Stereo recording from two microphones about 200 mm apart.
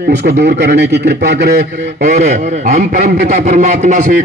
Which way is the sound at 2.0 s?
35° right (ahead or behind).